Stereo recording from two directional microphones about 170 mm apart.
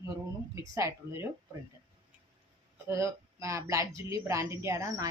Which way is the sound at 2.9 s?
20° right (ahead or behind).